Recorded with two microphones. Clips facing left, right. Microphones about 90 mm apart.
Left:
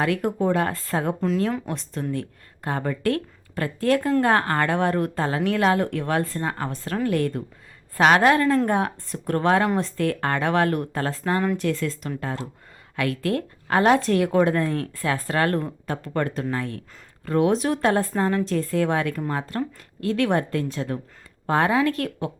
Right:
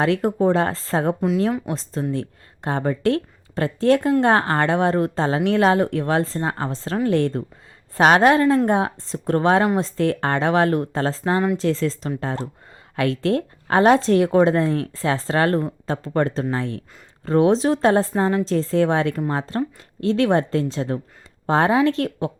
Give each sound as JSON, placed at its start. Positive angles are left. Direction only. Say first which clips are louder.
{"t": 0.0, "sound": "a woman's voice", "louder": "right 4 dB", "side_deg": -25}
{"t": 1.5, "sound": "a woman's voice", "louder": "right 3 dB", "side_deg": -15}